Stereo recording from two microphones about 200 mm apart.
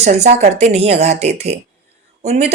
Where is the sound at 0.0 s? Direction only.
35° right (ahead or behind).